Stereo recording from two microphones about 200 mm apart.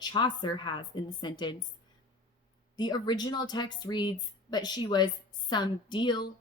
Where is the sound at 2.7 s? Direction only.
20° left (ahead or behind).